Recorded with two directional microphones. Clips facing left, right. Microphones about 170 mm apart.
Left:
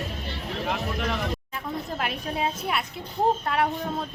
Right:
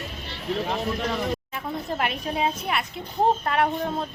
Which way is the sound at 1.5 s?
Centre (ahead or behind).